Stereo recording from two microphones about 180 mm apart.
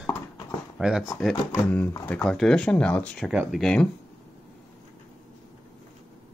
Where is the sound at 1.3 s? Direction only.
15° left (ahead or behind).